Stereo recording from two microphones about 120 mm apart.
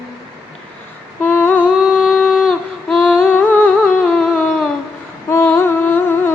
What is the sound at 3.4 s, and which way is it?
Humming, 15° left (ahead or behind).